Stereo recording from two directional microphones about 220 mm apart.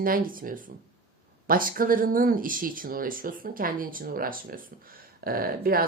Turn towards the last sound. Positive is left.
turn(degrees=-40)  # may be behind; listen again after turning